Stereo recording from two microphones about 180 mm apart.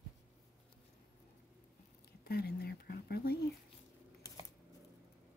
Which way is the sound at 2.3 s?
60° left (ahead or behind).